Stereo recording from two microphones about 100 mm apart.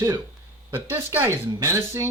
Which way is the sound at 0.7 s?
20° right (ahead or behind).